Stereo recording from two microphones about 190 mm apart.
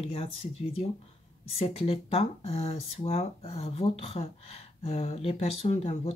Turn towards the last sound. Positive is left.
turn(degrees=35)  # may be behind; listen again after turning